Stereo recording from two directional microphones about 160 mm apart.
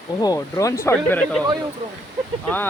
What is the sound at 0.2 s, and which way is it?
Speech, 25° left (ahead or behind).